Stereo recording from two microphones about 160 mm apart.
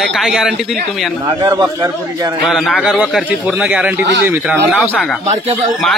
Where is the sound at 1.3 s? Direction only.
25° right (ahead or behind).